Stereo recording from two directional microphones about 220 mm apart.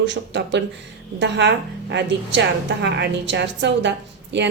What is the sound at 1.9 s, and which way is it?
A woman's voice, 55° right (ahead or behind).